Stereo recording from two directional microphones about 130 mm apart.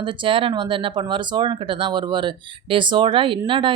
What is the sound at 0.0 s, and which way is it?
Speech, 40° right (ahead or behind).